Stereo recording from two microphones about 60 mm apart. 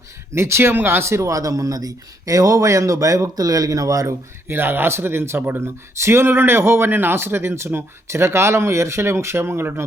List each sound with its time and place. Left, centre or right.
0.3 s speech: right
1.0 s speech: right
1.3 s speech: right
4.0 s speech: right